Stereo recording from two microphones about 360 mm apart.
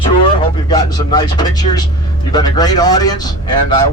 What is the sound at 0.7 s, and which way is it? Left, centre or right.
A man's voice, centre.